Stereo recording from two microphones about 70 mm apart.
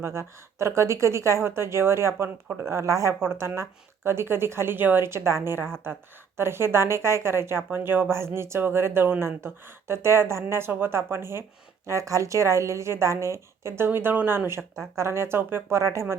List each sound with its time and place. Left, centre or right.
0.0 s a woman's voice: right
3.2 s a woman's voice: right
11.9 s a woman's voice: right